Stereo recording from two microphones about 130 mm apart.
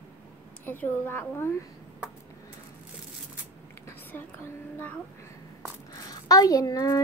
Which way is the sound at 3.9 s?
15° left (ahead or behind).